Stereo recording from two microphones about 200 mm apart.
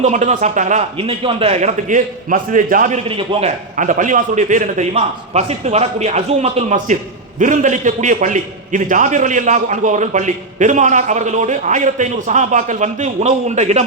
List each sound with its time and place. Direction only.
0.0 s a man's voice: 35° right (ahead or behind)
3.0 s a man's voice: 25° right (ahead or behind)
3.8 s a man's voice: 40° right (ahead or behind)